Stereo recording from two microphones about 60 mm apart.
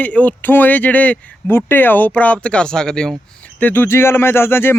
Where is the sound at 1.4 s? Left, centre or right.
Left; by 3.2 s centre.